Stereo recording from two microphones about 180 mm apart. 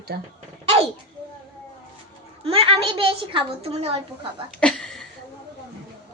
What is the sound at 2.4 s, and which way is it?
A child's voice, 30° right (ahead or behind).